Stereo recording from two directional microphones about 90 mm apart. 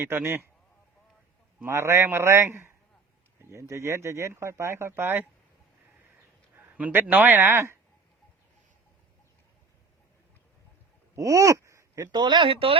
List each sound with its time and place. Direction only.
0.0 s a man's voice: 25° right (ahead or behind)
1.6 s a man's voice: 30° right (ahead or behind)
6.6 s speech: 20° right (ahead or behind)
11.1 s a sound: 35° right (ahead or behind)
12.1 s speech: 60° right (ahead or behind); by 12.7 s 90° right